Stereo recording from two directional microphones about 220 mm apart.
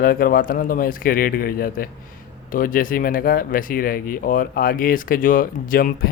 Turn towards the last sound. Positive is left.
turn(degrees=40)  # may be behind; listen again after turning